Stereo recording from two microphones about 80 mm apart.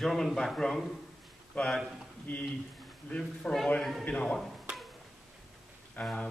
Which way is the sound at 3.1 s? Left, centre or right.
Centre.